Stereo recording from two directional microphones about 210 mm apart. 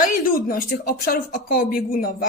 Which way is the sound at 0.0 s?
40° left (ahead or behind).